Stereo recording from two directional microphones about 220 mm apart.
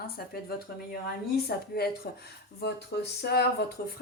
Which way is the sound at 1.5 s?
45° left (ahead or behind).